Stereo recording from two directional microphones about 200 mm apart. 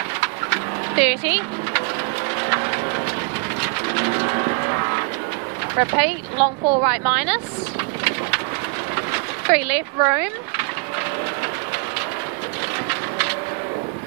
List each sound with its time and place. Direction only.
0.2 s bird: 10° right (ahead or behind)
2.4 s a sound: 15° right (ahead or behind)
3.9 s vehicle: 15° right (ahead or behind)
5.7 s speech: 15° right (ahead or behind)
9.5 s speech: 5° right (ahead or behind)